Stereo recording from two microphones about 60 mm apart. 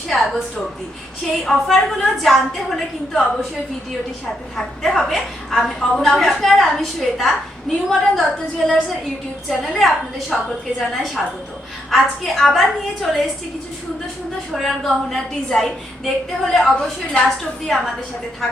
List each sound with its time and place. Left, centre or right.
0.1 s a woman's voice: centre
1.5 s a woman's voice: centre
4.5 s a woman's voice: centre
14.5 s a woman's voice: centre